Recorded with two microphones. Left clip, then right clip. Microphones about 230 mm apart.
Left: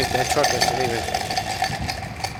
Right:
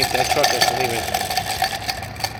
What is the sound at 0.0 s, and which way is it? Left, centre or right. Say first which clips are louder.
Speech: right 3 dB; right.